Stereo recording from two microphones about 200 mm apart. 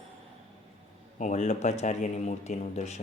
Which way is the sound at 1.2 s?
35° left (ahead or behind).